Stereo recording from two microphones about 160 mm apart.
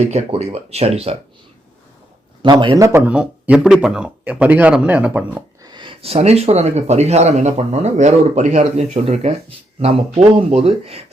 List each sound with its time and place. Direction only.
0.1 s speech: 40° right (ahead or behind)
2.4 s a man's voice: 30° right (ahead or behind)
3.1 s speech: 5° right (ahead or behind)
5.6 s speech: 30° right (ahead or behind)